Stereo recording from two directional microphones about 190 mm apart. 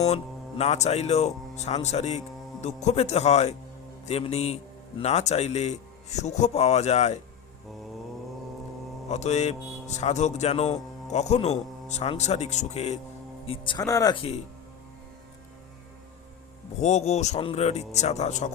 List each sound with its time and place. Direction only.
0.0 s speech: 35° left (ahead or behind)
9.0 s speech: 35° left (ahead or behind)
13.5 s speech: 25° left (ahead or behind)
16.8 s speech: 35° left (ahead or behind)